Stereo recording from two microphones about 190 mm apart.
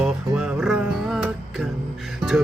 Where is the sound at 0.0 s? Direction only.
5° right (ahead or behind).